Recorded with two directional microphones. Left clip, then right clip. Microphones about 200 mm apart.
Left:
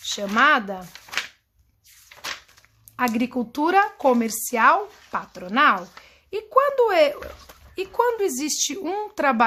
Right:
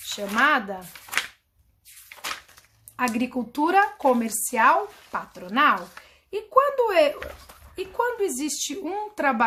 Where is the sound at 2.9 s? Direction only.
40° left (ahead or behind).